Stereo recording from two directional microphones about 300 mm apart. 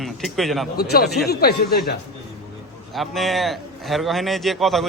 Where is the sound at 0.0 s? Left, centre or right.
Centre.